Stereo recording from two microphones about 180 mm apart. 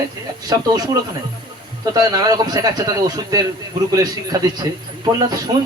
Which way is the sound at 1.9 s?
20° right (ahead or behind).